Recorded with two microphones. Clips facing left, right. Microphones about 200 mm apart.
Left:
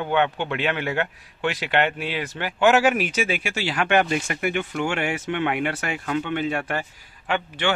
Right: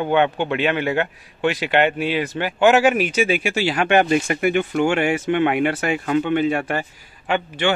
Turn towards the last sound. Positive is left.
turn(degrees=-10)  # may be behind; listen again after turning